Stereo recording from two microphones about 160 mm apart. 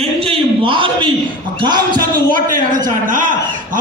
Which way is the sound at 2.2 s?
60° right (ahead or behind).